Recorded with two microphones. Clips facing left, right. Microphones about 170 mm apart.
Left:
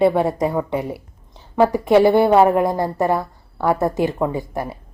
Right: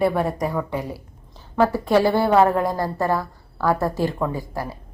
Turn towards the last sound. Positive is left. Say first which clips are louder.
# left 4 dB
turn(degrees=20)  # may be behind; listen again after turning